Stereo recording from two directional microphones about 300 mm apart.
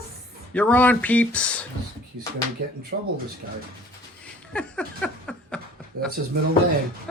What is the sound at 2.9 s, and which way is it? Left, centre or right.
Speech, right.